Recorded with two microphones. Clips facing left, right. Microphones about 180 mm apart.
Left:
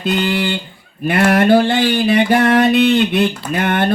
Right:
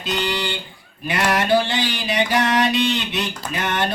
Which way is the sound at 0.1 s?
55° left (ahead or behind).